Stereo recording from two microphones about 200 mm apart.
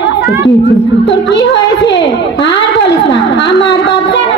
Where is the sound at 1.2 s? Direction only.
60° left (ahead or behind).